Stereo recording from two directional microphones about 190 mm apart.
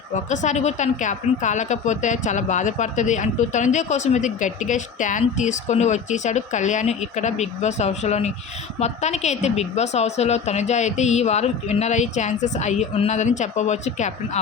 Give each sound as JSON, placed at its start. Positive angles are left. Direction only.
{"t": 0.1, "sound": "a woman's voice", "side_deg": 40}